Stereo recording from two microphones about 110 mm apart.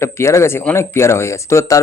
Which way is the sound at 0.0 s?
25° left (ahead or behind).